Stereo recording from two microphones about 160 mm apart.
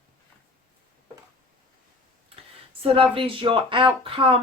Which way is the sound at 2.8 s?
35° right (ahead or behind).